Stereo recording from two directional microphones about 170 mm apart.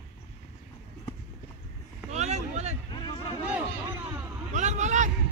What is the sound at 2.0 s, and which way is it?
Vehicle, 40° right (ahead or behind).